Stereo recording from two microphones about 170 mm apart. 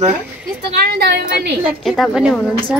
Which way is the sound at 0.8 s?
70° right (ahead or behind).